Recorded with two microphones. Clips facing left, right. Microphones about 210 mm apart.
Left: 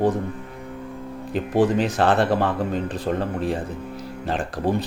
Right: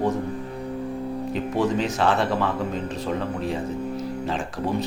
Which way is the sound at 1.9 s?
55° left (ahead or behind).